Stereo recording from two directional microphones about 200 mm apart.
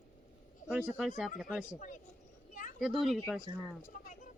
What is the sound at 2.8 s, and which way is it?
Speech, centre (ahead or behind).